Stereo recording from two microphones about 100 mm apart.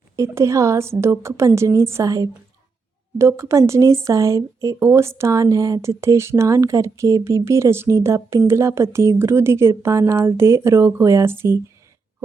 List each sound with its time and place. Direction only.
0.2 s a woman's voice: 30° right (ahead or behind)